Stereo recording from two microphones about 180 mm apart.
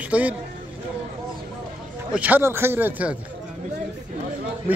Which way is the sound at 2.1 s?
10° right (ahead or behind).